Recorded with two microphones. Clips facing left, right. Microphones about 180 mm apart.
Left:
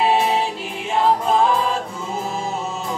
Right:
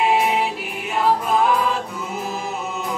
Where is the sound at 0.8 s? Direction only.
25° left (ahead or behind).